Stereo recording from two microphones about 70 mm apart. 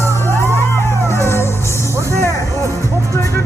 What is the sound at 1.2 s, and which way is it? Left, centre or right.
Music, left.